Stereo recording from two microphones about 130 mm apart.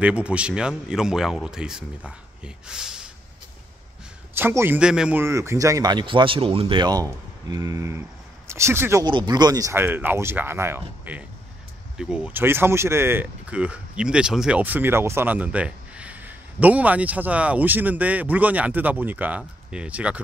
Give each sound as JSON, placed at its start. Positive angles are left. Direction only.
{"t": 0.0, "sound": "speech", "side_deg": -10}
{"t": 4.3, "sound": "speech", "side_deg": -15}
{"t": 5.2, "sound": "speech", "side_deg": -20}
{"t": 9.0, "sound": "speech", "side_deg": -35}